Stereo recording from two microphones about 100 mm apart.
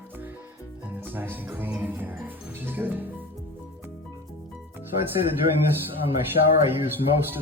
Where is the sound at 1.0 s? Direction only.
20° right (ahead or behind).